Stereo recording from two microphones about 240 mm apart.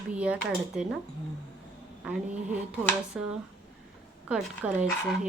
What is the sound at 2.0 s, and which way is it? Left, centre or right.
Speech, centre.